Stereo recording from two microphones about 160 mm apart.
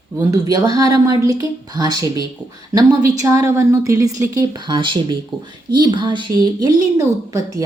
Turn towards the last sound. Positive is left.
turn(degrees=-25)  # may be behind; listen again after turning